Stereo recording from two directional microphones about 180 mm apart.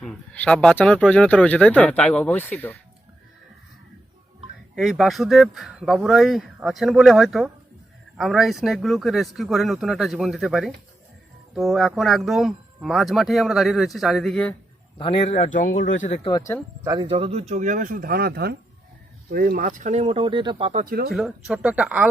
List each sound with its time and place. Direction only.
0.0 s speech: 5° left (ahead or behind)
4.7 s speech: centre (ahead or behind)
14.9 s a man's voice: 30° left (ahead or behind)
16.2 s speech: 20° left (ahead or behind)
16.8 s speech: 20° right (ahead or behind)
17.1 s speech: 35° right (ahead or behind)
17.5 s speech: 45° right (ahead or behind)
20.8 s speech: 60° right (ahead or behind)
21.1 s speech: 5° right (ahead or behind)